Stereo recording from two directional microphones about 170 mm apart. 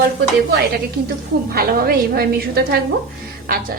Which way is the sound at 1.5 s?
60° right (ahead or behind).